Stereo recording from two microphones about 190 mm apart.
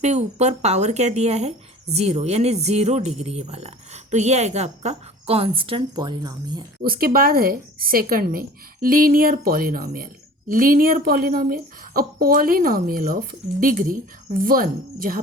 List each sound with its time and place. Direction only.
0.0 s speech: 35° right (ahead or behind)
6.8 s speech: 50° right (ahead or behind)